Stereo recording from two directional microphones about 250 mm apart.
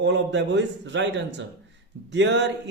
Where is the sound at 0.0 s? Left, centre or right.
Right.